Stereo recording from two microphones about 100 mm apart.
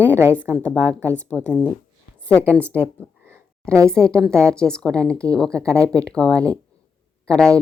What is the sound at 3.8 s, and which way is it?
Speech, 10° left (ahead or behind).